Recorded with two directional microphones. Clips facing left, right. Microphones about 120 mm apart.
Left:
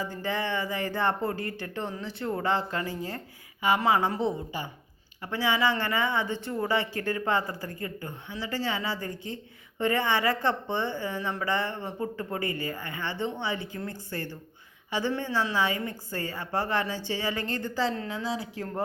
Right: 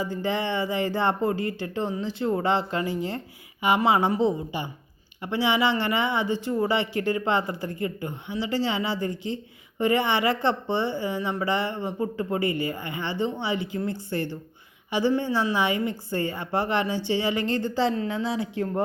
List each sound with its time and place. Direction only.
0.2 s speech: 20° right (ahead or behind)